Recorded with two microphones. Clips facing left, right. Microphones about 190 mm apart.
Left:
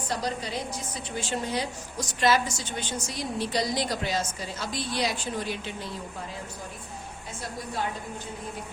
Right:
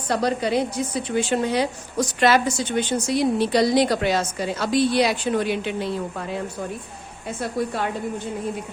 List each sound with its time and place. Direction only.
0.1 s a woman's voice: 65° right (ahead or behind)